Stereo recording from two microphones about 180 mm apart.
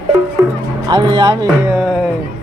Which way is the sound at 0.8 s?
25° right (ahead or behind).